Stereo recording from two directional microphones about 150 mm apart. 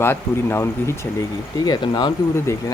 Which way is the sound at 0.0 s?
15° left (ahead or behind).